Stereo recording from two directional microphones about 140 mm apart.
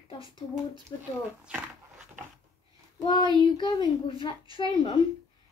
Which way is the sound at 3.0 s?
35° left (ahead or behind).